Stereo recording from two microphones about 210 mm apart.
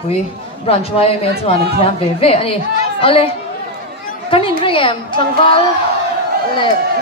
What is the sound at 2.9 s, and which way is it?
Chatter, 25° left (ahead or behind).